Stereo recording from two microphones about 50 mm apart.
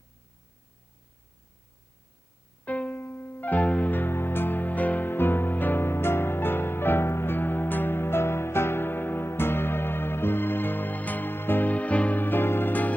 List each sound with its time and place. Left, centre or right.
2.6 s music: left
3.0 s music: left